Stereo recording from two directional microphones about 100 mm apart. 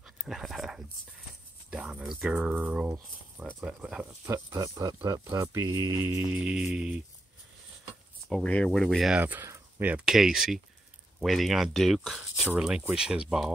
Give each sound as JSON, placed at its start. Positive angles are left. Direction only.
{"t": 0.0, "sound": "dog", "side_deg": -5}
{"t": 1.7, "sound": "speech", "side_deg": -10}
{"t": 3.6, "sound": "music", "side_deg": -10}
{"t": 4.3, "sound": "speech", "side_deg": -35}
{"t": 6.3, "sound": "music", "side_deg": -10}
{"t": 8.3, "sound": "speech", "side_deg": 10}
{"t": 9.2, "sound": "music", "side_deg": -15}
{"t": 9.8, "sound": "speech", "side_deg": -15}
{"t": 10.0, "sound": "speech", "side_deg": -5}
{"t": 12.4, "sound": "music", "side_deg": -5}